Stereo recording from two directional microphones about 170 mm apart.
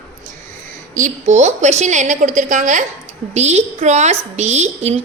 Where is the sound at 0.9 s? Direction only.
45° right (ahead or behind).